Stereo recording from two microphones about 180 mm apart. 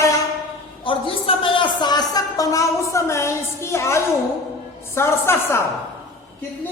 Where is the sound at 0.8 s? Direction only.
30° left (ahead or behind); by 5.6 s 15° left (ahead or behind).